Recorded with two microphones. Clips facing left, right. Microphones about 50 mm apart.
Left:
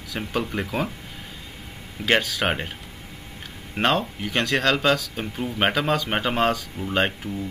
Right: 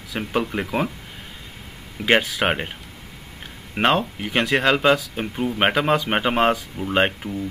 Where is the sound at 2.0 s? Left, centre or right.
Centre.